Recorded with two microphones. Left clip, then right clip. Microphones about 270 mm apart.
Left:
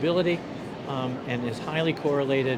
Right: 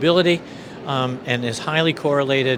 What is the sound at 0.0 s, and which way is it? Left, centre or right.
Speech, right.